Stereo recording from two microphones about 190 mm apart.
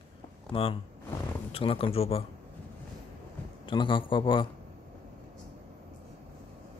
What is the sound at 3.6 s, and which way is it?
Speech, 25° left (ahead or behind).